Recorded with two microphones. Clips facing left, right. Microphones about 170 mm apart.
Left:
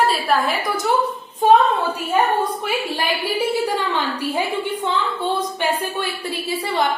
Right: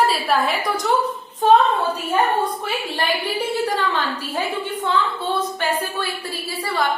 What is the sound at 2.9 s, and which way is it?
A woman's voice, 10° left (ahead or behind).